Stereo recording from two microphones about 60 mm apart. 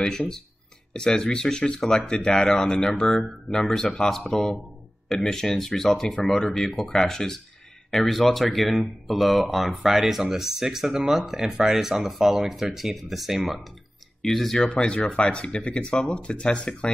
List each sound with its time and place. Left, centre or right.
0.0 s speech: centre